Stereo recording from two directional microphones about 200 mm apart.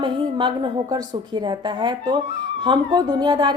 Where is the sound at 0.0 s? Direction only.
25° right (ahead or behind).